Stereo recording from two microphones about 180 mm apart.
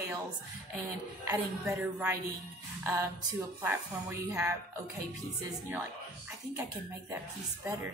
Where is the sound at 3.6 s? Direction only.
15° right (ahead or behind).